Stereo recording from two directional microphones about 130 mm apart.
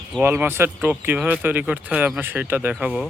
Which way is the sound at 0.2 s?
15° right (ahead or behind).